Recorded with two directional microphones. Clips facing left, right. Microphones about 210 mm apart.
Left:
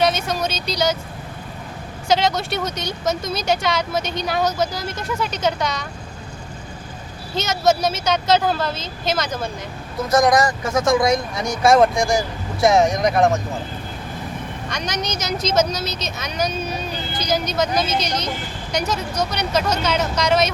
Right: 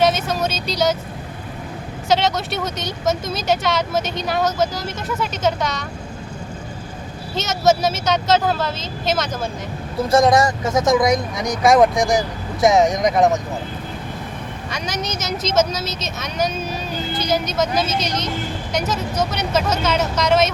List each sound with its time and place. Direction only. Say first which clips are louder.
0.0 s speech: right 2 dB; 5° right (ahead or behind)
2.0 s speech: even; centre (ahead or behind)
7.3 s speech: right 1 dB; centre (ahead or behind)
10.0 s speech: right 2 dB; 30° right (ahead or behind)
14.7 s speech: even; 5° right (ahead or behind)